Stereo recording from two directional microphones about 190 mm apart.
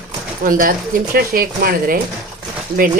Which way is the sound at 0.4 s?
45° right (ahead or behind).